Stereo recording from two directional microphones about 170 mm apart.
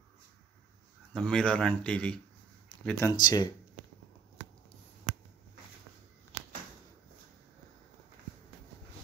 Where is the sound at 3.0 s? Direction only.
25° left (ahead or behind).